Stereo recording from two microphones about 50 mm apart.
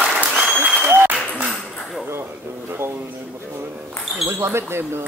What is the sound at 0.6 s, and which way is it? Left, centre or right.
Applause, right.